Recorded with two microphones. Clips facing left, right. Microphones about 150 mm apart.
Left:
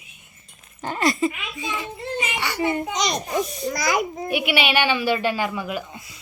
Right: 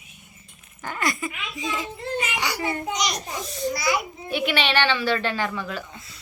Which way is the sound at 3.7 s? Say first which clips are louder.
Left 5 dB; 45° left (ahead or behind).